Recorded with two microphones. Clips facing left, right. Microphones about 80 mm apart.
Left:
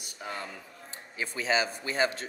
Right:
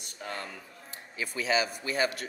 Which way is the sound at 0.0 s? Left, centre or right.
Centre.